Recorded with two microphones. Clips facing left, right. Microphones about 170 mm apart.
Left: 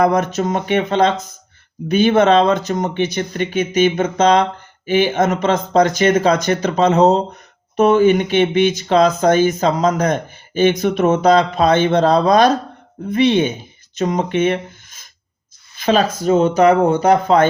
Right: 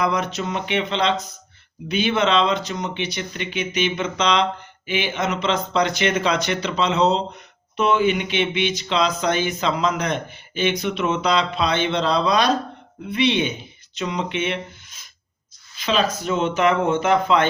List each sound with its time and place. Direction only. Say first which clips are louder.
0.0 s speech: left 7 dB; 50° left (ahead or behind)